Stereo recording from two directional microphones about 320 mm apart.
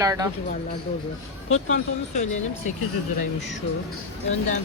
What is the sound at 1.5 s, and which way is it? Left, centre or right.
Speech, left.